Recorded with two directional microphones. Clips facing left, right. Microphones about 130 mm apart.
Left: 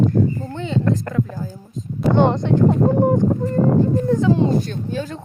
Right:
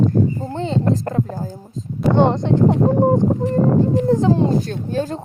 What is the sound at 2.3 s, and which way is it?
Speech, 30° right (ahead or behind).